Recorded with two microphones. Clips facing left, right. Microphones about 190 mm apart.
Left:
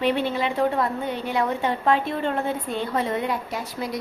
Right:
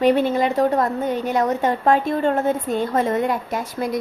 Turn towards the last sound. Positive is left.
turn(degrees=-50)  # may be behind; listen again after turning